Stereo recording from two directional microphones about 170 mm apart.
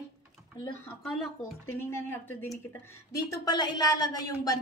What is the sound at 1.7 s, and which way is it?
Speech, 15° left (ahead or behind).